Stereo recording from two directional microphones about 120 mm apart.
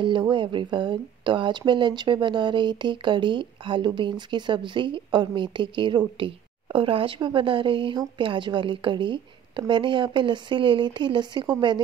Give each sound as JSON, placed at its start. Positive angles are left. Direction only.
{"t": 0.0, "sound": "a woman's voice", "side_deg": -40}